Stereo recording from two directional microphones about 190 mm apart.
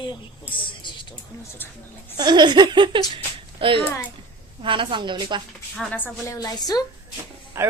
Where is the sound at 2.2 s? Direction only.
20° right (ahead or behind).